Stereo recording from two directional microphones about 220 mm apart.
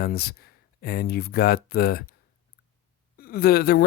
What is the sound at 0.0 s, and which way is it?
Speech, 45° left (ahead or behind).